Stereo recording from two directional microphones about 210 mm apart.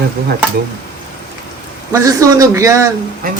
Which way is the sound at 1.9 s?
15° right (ahead or behind).